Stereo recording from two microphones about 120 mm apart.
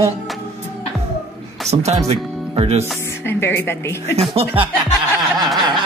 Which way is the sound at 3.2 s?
20° left (ahead or behind).